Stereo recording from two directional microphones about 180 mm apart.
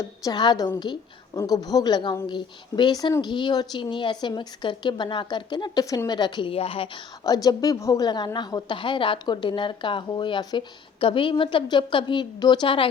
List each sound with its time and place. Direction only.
0.0 s a woman's voice: 20° left (ahead or behind)
7.3 s a woman's voice: 20° left (ahead or behind)